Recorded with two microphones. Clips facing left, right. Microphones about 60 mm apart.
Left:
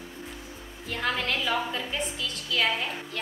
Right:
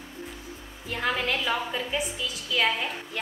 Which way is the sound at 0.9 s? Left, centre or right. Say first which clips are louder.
Right 1 dB; centre.